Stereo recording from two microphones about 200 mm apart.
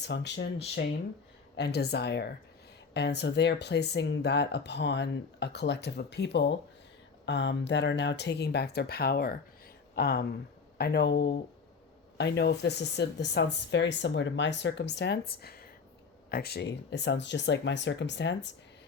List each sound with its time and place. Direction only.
0.0 s speech: 60° left (ahead or behind)